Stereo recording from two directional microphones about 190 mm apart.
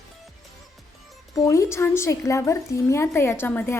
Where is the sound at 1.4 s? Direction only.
15° left (ahead or behind).